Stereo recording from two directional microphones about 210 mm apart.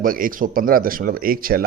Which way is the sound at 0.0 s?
40° right (ahead or behind).